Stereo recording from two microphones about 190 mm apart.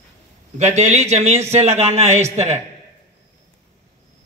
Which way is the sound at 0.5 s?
35° right (ahead or behind).